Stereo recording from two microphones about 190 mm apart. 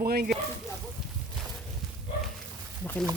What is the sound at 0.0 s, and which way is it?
Speech, 55° right (ahead or behind).